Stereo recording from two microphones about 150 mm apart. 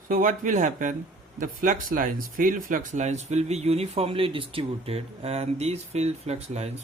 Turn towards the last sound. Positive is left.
turn(degrees=-45)  # may be behind; listen again after turning